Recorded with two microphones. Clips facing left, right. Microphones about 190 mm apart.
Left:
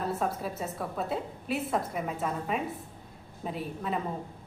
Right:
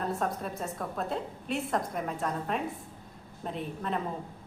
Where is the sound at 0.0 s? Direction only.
5° left (ahead or behind).